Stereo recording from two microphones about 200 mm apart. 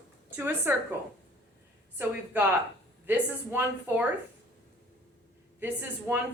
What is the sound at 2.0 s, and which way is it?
A woman's voice, 10° right (ahead or behind).